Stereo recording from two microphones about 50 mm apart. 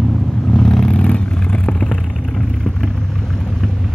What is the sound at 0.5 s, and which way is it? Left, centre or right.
Vehicle, centre.